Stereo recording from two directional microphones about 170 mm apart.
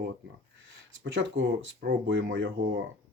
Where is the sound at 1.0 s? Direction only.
90° right.